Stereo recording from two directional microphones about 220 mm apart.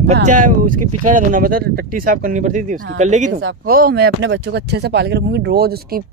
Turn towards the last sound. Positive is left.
turn(degrees=-50)  # may be behind; listen again after turning